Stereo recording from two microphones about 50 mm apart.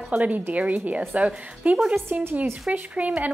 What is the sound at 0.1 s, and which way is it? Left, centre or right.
A woman's voice, right.